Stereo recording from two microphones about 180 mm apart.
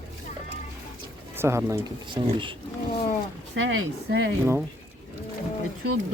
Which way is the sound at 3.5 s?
85° right.